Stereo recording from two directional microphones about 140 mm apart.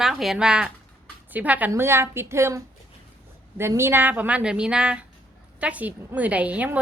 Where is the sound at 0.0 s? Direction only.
Centre (ahead or behind); by 2.6 s 20° right (ahead or behind).